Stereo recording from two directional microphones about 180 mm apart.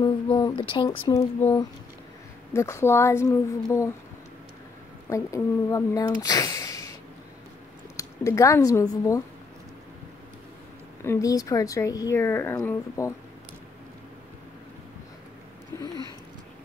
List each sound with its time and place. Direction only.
0.0 s speech: 25° left (ahead or behind)
2.5 s speech: 15° left (ahead or behind)
5.1 s speech: 15° left (ahead or behind)
11.1 s speech: 20° left (ahead or behind)